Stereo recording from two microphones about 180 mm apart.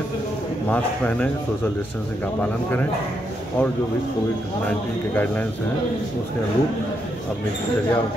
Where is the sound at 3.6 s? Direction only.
10° left (ahead or behind).